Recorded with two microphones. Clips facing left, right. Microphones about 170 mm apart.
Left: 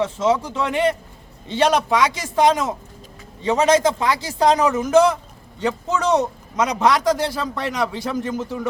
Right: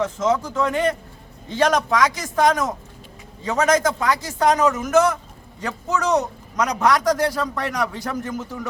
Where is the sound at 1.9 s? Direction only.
25° left (ahead or behind).